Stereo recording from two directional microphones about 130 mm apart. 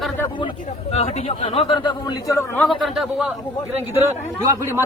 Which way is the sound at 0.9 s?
55° left (ahead or behind).